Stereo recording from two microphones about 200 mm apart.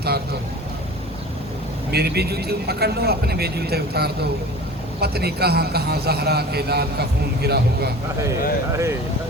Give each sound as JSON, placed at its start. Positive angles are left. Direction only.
{"t": 1.9, "sound": "speech", "side_deg": -55}
{"t": 8.2, "sound": "speech", "side_deg": -15}